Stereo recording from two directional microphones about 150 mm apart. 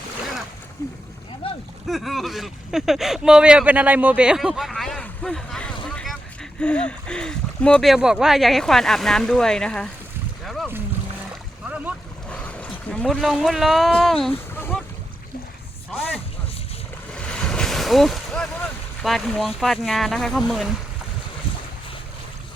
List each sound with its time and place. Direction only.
0.8 s speech: 20° left (ahead or behind)
1.4 s a sound: 35° left (ahead or behind)
1.9 s speech: centre (ahead or behind)
10.4 s boat: centre (ahead or behind)
12.3 s speech: 10° left (ahead or behind)
14.5 s boat: 15° left (ahead or behind)
17.1 s vehicle: 5° left (ahead or behind)
19.0 s speech: centre (ahead or behind)